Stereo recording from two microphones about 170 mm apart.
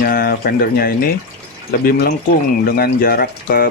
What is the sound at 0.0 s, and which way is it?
Speech, 60° left (ahead or behind).